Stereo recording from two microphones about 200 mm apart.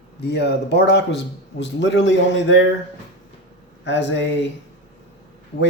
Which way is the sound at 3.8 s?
65° left (ahead or behind).